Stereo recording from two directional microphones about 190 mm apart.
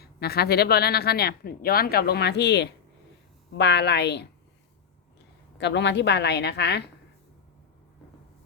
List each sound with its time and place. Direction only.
0.0 s speech: 55° left (ahead or behind)
5.5 s speech: 65° left (ahead or behind)